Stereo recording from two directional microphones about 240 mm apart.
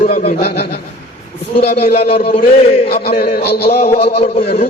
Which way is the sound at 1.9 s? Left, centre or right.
Left.